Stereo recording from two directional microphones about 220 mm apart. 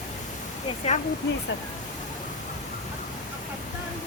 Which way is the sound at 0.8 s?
30° left (ahead or behind).